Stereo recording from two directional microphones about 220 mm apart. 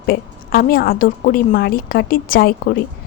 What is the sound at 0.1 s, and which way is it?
A woman's voice, 45° left (ahead or behind).